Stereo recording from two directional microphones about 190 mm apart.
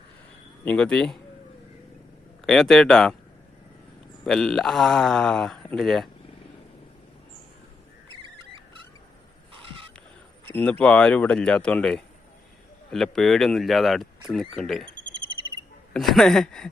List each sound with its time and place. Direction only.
0.6 s speech: 5° left (ahead or behind)
2.5 s speech: centre (ahead or behind)
4.2 s speech: centre (ahead or behind)
10.5 s speech: 5° left (ahead or behind)
15.9 s speech: centre (ahead or behind)